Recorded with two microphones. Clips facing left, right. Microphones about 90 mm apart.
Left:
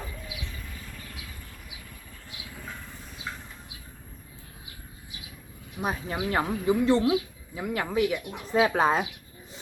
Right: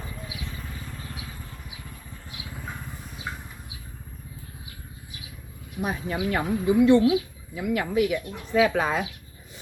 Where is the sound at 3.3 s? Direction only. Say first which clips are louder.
Right 2 dB; 15° right (ahead or behind).